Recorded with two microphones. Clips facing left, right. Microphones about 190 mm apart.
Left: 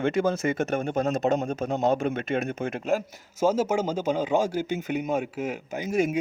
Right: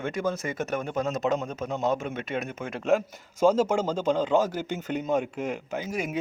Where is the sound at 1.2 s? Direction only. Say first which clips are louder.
Left 3 dB; 45° left (ahead or behind).